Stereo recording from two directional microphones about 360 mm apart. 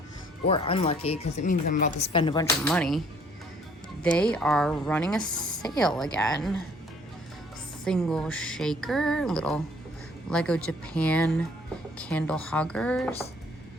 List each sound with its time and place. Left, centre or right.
0.4 s speech: centre
4.0 s speech: centre
7.9 s speech: centre